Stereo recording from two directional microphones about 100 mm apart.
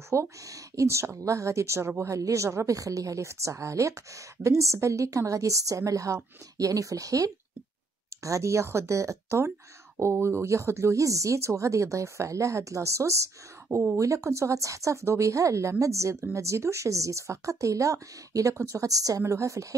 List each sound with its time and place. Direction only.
0.1 s a woman's voice: 30° right (ahead or behind)